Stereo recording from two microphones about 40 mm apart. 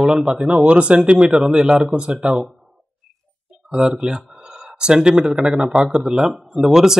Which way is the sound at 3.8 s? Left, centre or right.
Right.